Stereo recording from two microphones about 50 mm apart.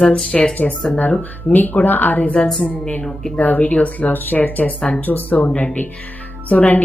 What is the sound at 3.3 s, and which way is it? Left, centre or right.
Speech, left.